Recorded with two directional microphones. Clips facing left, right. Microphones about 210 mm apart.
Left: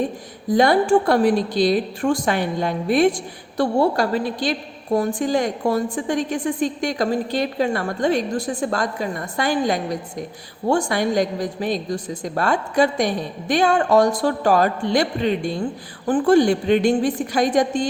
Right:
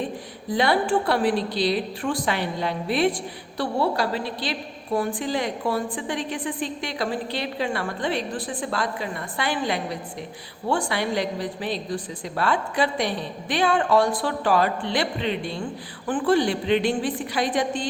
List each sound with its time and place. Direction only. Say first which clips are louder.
0.5 s a woman's voice: left 6 dB; 45° left (ahead or behind)